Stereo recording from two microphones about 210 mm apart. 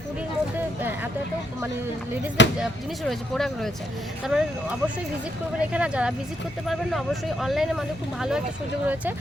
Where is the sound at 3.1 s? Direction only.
Centre (ahead or behind).